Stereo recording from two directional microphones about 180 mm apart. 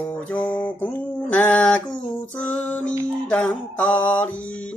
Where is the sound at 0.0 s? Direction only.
10° left (ahead or behind).